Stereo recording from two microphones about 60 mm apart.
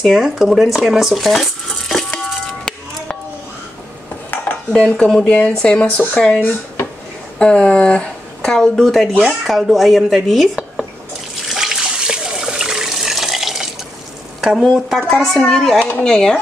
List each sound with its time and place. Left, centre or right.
0.0 s speech: centre
2.4 s music: centre
4.7 s speech: centre
11.4 s water: centre
14.6 s speech: centre